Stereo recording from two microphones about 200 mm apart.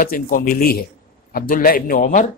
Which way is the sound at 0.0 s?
45° left (ahead or behind).